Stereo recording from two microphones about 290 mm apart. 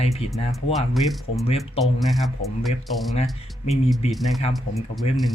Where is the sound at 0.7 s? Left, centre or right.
Centre.